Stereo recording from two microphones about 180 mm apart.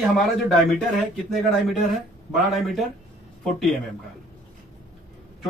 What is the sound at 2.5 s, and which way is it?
Speech, centre (ahead or behind).